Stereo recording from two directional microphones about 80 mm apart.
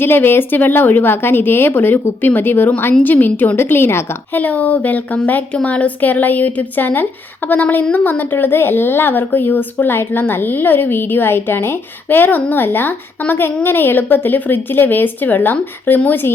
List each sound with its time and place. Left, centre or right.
0.0 s a woman's voice: left